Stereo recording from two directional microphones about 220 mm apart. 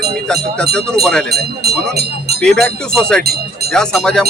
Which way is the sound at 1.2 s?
45° right (ahead or behind).